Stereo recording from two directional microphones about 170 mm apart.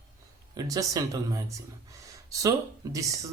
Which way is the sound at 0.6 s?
20° right (ahead or behind).